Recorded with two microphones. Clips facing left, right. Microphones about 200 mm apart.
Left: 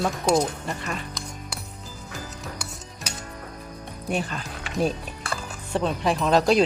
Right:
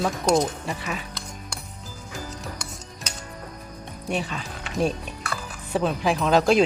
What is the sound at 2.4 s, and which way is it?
Music, 5° left (ahead or behind).